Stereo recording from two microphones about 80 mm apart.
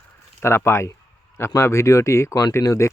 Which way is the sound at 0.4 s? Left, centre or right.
Left.